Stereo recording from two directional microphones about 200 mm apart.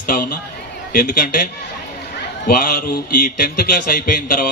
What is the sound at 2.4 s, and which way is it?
A man's voice, 45° left (ahead or behind).